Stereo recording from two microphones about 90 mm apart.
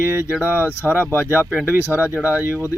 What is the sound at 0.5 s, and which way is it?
Speech, 25° left (ahead or behind).